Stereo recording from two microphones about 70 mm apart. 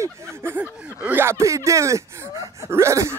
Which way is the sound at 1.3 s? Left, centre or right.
Right.